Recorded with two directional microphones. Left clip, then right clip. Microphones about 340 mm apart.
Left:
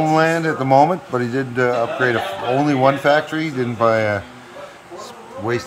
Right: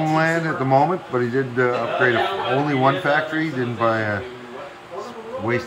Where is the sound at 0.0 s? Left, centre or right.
Left.